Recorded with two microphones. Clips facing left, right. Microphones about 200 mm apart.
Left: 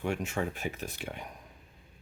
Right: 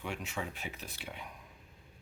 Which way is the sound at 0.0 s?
45° left (ahead or behind).